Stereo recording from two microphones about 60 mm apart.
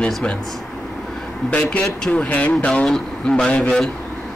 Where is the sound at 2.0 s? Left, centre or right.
Left.